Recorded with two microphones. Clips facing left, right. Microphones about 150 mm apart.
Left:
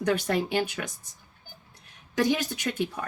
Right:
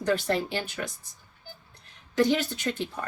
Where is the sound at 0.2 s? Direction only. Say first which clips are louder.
Left 2 dB; 15° left (ahead or behind).